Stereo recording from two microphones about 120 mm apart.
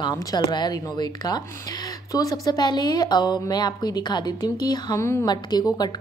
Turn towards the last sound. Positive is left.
turn(degrees=35)  # may be behind; listen again after turning